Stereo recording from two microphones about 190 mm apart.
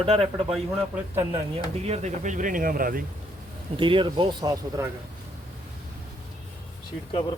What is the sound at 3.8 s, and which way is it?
A man's voice, 25° right (ahead or behind).